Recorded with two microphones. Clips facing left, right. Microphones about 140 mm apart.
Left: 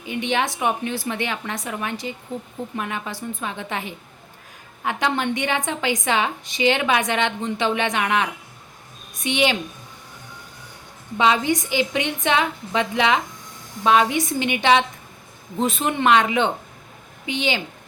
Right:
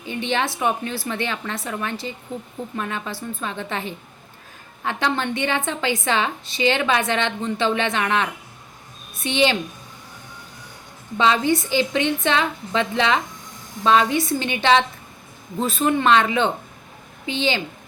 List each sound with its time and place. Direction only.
0.0 s a woman's voice: 15° left (ahead or behind)
11.2 s a woman's voice: 15° left (ahead or behind)